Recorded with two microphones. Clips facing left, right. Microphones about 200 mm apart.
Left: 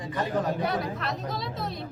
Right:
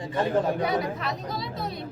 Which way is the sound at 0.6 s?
Centre (ahead or behind).